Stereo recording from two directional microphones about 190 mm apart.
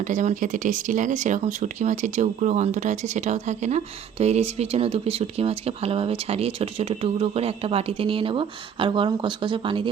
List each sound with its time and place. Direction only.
0.0 s speech: 40° right (ahead or behind); by 9.9 s 25° right (ahead or behind)